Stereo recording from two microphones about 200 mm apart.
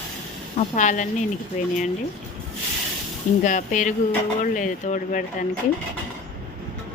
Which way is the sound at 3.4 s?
40° left (ahead or behind).